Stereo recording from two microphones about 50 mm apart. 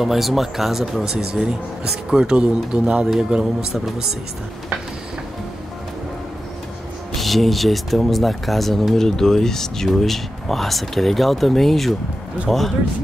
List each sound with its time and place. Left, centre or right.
0.0 s speech: centre
7.2 s speech: centre